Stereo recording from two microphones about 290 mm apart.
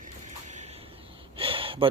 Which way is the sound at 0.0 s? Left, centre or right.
Right.